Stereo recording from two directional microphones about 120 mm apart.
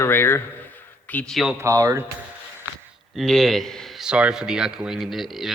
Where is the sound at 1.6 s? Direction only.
25° right (ahead or behind).